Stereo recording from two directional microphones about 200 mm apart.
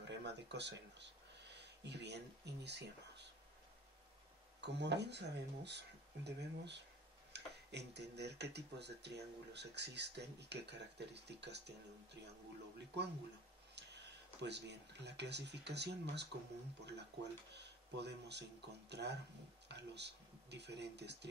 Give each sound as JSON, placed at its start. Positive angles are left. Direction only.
{"t": 0.0, "sound": "speech", "side_deg": -60}
{"t": 4.6, "sound": "speech", "side_deg": -60}